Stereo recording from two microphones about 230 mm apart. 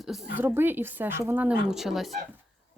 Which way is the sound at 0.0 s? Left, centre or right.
Centre.